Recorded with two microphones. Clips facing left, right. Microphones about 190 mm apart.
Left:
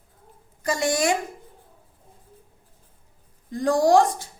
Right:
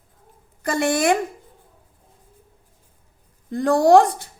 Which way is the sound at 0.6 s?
60° right (ahead or behind).